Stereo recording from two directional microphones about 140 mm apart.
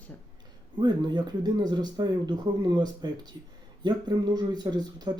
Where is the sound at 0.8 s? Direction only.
30° right (ahead or behind).